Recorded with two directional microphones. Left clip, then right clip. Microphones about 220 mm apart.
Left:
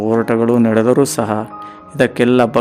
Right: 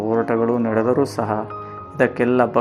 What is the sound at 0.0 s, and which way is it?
Speech, 35° left (ahead or behind).